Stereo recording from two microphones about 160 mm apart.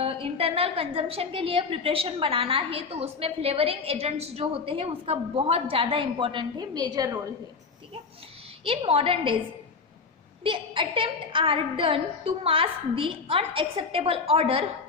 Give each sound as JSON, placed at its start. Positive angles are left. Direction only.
{"t": 0.0, "sound": "a woman's voice", "side_deg": -35}
{"t": 8.6, "sound": "a woman's voice", "side_deg": -35}
{"t": 10.4, "sound": "a woman's voice", "side_deg": -35}